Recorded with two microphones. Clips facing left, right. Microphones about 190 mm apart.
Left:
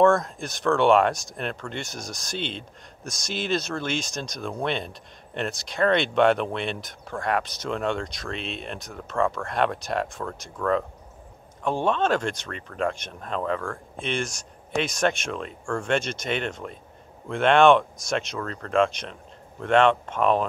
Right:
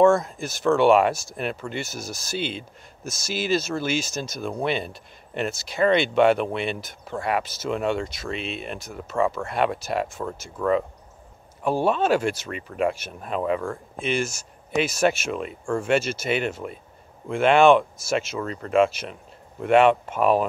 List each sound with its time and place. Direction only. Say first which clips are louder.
0.0 s speech: right 2 dB; centre (ahead or behind)
14.0 s speech: right 3 dB; 5° right (ahead or behind)